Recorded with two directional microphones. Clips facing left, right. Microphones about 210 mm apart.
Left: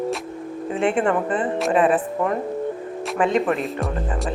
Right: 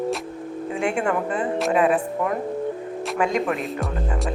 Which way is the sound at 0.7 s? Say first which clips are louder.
Left 3 dB; 10° right (ahead or behind).